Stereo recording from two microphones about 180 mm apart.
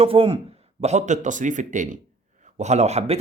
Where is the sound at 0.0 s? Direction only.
30° right (ahead or behind).